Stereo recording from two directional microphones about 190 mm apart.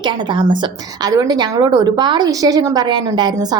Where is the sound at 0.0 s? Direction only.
25° right (ahead or behind).